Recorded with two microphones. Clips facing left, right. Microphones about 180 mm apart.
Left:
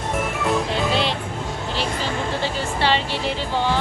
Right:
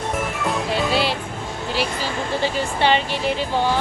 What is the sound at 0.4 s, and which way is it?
Music, 5° right (ahead or behind).